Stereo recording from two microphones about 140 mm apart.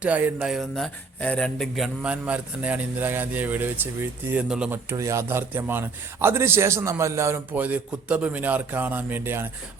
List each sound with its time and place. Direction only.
0.0 s a man's voice: 10° right (ahead or behind)
4.9 s a man's voice: 20° right (ahead or behind)